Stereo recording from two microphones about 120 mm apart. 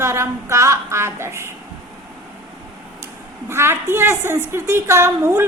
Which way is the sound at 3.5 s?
20° right (ahead or behind).